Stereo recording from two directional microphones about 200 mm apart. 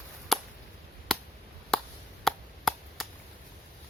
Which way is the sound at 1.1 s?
Centre (ahead or behind).